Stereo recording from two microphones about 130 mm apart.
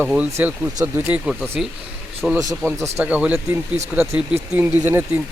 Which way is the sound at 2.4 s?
25° right (ahead or behind).